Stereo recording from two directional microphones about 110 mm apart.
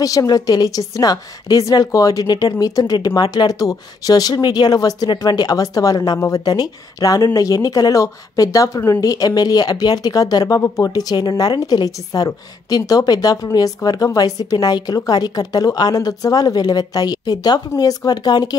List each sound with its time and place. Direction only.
0.0 s speech: 30° left (ahead or behind)